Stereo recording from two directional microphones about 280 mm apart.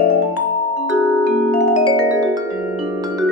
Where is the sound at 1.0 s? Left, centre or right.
Right.